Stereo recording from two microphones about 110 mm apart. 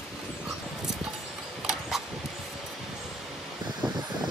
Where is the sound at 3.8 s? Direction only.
40° right (ahead or behind).